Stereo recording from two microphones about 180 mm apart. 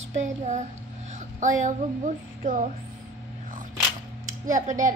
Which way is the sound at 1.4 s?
45° right (ahead or behind).